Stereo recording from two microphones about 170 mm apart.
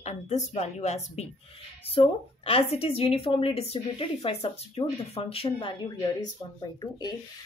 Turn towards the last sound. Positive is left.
turn(degrees=25)  # may be behind; listen again after turning